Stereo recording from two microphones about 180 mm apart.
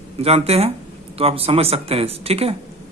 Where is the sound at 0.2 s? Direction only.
35° right (ahead or behind).